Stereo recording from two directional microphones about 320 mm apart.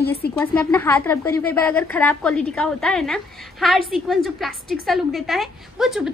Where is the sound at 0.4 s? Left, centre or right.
Centre.